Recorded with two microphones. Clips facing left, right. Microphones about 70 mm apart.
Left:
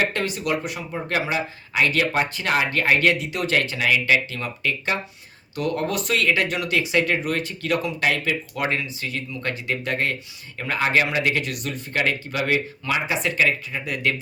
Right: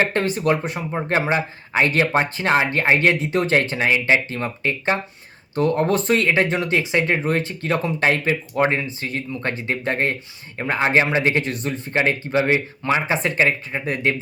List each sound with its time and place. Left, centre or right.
0.0 s speech: right